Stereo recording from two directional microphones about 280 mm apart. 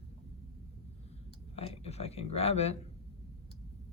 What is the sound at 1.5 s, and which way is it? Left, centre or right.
Speech, left.